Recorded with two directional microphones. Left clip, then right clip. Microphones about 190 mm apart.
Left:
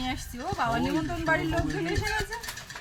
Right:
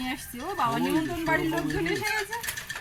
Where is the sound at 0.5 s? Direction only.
20° left (ahead or behind).